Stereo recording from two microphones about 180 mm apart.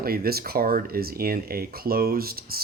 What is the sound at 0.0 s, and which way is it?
Speech, 55° right (ahead or behind).